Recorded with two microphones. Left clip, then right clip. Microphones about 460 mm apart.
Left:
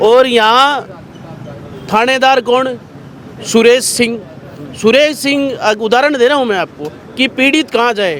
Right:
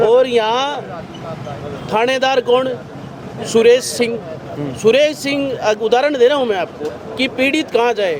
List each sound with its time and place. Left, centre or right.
0.0 s speech: left
1.9 s a man's voice: left